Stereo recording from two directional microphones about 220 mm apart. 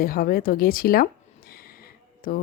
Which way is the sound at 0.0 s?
40° left (ahead or behind).